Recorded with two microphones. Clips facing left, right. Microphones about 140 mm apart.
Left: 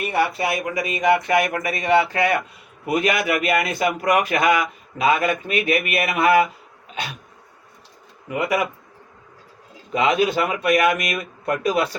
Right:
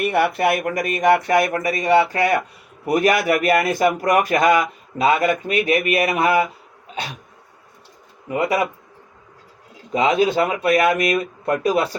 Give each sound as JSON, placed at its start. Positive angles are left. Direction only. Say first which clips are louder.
{"t": 0.1, "sound": "a man's voice", "louder": "right 1 dB", "side_deg": -60}
{"t": 8.3, "sound": "a man's voice", "louder": "right 2 dB", "side_deg": -30}
{"t": 9.9, "sound": "a man's voice", "louder": "right 2 dB", "side_deg": -35}